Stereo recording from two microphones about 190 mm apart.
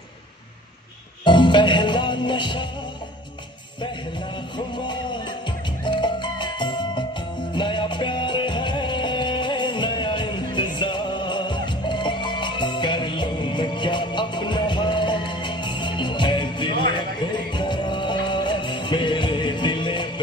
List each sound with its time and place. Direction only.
1.2 s music: 25° left (ahead or behind)
4.6 s music: 25° left (ahead or behind)